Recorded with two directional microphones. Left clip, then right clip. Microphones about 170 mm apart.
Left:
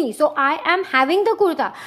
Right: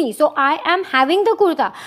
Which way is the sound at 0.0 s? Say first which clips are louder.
Right 2 dB; 20° right (ahead or behind).